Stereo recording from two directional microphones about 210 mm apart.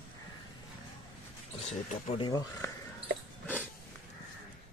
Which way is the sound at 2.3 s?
20° left (ahead or behind).